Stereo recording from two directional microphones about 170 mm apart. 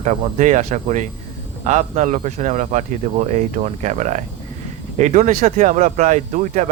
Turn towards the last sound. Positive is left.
turn(degrees=-45)  # may be behind; listen again after turning